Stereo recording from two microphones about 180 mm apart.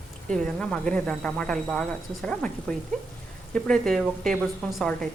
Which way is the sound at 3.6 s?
Centre (ahead or behind).